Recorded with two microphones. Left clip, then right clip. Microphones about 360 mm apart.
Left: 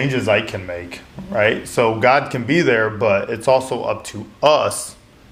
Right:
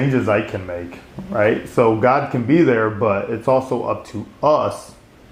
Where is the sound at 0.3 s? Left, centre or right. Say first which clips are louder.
Left 1 dB; left.